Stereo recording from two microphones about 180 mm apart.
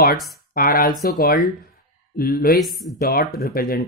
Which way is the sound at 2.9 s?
60° left (ahead or behind).